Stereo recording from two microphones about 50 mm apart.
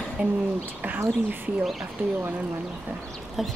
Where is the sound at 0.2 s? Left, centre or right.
Right.